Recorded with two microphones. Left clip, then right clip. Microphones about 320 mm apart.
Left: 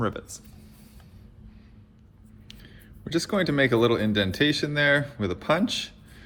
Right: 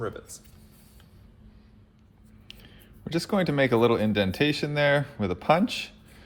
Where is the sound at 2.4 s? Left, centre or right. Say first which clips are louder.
Right 1 dB; centre.